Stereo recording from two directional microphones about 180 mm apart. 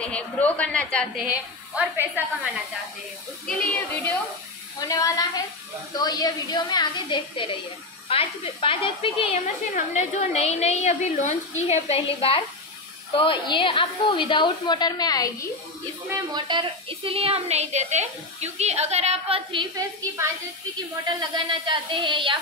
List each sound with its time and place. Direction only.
0.0 s a woman's voice: 5° left (ahead or behind)
1.2 s a woman's voice: 5° right (ahead or behind)
3.4 s a woman's voice: 5° left (ahead or behind); by 9.4 s 30° left (ahead or behind)
9.7 s a woman's voice: 50° left (ahead or behind); by 15.4 s 20° left (ahead or behind)
16.3 s a woman's voice: 25° right (ahead or behind)